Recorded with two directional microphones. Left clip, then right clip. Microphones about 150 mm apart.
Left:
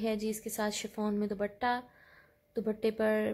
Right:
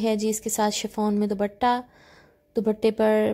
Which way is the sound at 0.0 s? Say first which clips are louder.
Right 9 dB; 40° right (ahead or behind).